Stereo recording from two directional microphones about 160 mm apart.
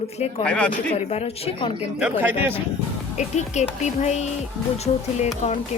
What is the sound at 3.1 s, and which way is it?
A woman's voice, 45° left (ahead or behind).